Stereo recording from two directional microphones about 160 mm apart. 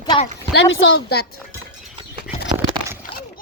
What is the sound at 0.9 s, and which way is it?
Speech, 80° left.